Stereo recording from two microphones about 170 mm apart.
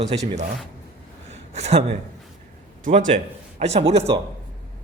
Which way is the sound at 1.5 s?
40° right (ahead or behind).